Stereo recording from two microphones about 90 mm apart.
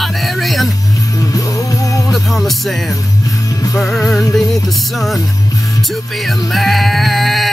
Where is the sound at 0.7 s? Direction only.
40° left (ahead or behind).